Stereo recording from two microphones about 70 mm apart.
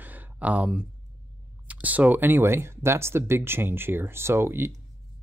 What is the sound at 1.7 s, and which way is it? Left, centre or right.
Speech, right.